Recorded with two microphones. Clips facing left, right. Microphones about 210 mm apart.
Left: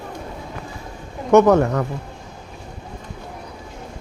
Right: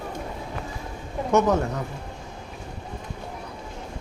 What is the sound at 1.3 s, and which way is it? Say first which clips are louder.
Speech: left 8 dB; 65° left (ahead or behind).